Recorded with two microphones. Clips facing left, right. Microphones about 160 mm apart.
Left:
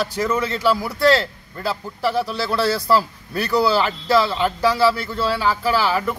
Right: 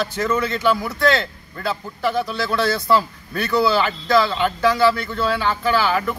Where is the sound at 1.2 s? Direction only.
35° left (ahead or behind).